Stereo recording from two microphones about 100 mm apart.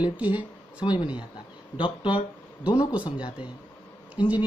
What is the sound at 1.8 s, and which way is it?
Speech, 55° left (ahead or behind).